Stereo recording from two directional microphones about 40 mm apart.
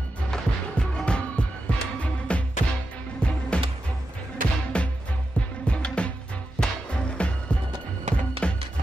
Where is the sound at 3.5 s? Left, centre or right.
Left.